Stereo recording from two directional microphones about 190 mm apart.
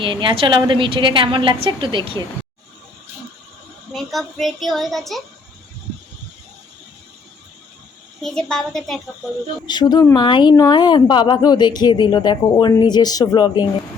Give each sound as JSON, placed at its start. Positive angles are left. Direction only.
{"t": 0.0, "sound": "a woman's voice", "side_deg": -25}
{"t": 3.9, "sound": "a woman's voice", "side_deg": 0}
{"t": 8.2, "sound": "a woman's voice", "side_deg": 5}
{"t": 9.6, "sound": "a woman's voice", "side_deg": 20}